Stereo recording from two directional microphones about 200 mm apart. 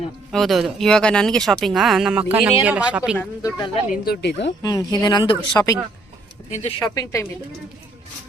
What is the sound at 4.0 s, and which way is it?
Speech, 55° left (ahead or behind).